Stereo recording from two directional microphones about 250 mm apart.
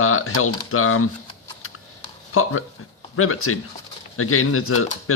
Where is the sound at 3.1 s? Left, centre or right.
Left.